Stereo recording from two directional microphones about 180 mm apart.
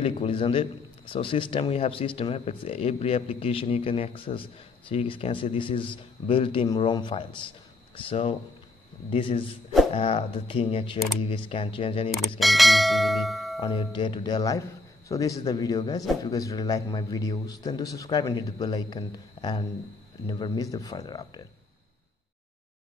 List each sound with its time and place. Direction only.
0.0 s speech: 30° left (ahead or behind)
12.4 s speech: centre (ahead or behind)
13.6 s speech: 30° left (ahead or behind)